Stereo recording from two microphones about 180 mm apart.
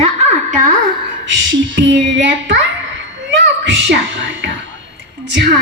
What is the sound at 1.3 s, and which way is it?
A child's voice, 90° right.